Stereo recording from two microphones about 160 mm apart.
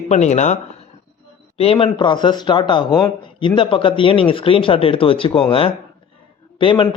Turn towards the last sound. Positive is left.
turn(degrees=30)  # may be behind; listen again after turning